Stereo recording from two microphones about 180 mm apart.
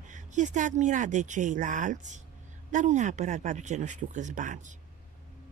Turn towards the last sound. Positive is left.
turn(degrees=-45)  # may be behind; listen again after turning